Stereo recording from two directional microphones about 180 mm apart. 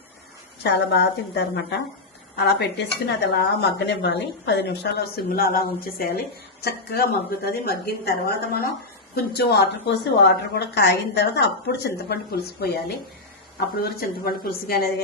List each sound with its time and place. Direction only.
0.6 s a woman's voice: 65° left (ahead or behind)
13.9 s a woman's voice: 55° left (ahead or behind)